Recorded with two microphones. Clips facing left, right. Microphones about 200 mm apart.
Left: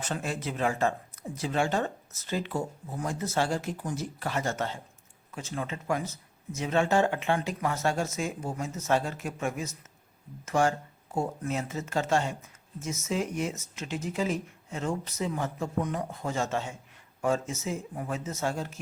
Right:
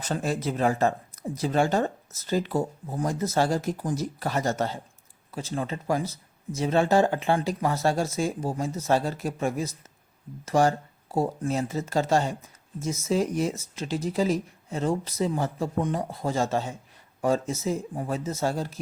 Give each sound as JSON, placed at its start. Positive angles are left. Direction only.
{"t": 0.0, "sound": "speech", "side_deg": -40}